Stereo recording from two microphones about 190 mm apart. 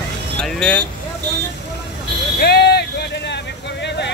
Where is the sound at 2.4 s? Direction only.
60° left (ahead or behind).